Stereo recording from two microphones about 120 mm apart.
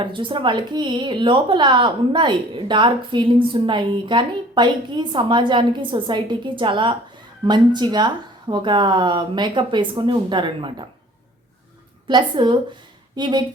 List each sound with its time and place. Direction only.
0.0 s a woman's voice: 45° right (ahead or behind)
12.0 s a woman's voice: 40° right (ahead or behind)